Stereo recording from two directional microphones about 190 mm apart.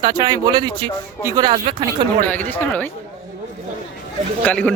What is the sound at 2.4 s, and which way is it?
Speech, 10° left (ahead or behind).